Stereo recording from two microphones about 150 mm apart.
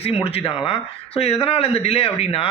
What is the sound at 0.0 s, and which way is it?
Speech, 40° left (ahead or behind).